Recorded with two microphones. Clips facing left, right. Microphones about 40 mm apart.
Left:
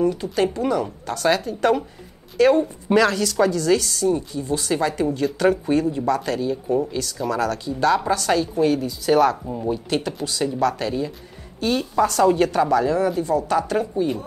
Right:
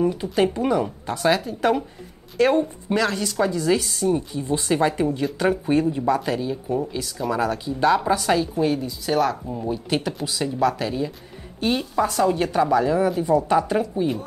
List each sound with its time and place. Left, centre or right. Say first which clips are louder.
0.0 s speech: even; centre
2.3 s a woman's voice: left 2 dB; right
2.6 s speech: left 5 dB; centre
3.4 s speech: even; centre
5.0 s speech: left 2 dB; centre
7.2 s speech: right 1 dB; centre
13.2 s speech: right 2 dB; centre